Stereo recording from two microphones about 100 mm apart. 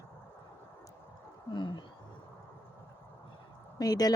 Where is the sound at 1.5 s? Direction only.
50° left (ahead or behind).